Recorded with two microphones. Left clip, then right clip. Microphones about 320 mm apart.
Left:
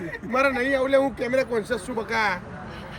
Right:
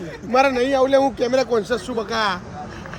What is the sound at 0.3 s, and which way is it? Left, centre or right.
Speech, centre.